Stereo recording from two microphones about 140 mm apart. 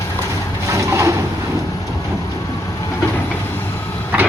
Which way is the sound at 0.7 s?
20° right (ahead or behind).